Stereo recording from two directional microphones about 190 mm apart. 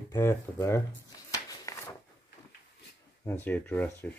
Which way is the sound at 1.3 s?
20° left (ahead or behind).